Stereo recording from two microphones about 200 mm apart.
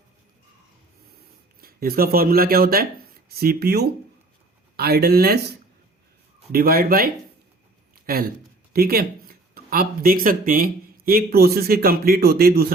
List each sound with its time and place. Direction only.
1.6 s speech: 50° right (ahead or behind)
7.9 s a sound: 45° right (ahead or behind)
8.7 s speech: 50° right (ahead or behind)